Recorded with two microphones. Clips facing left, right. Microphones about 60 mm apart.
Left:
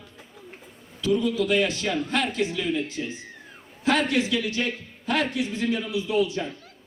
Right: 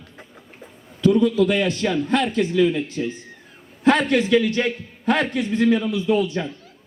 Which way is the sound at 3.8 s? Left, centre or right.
Right.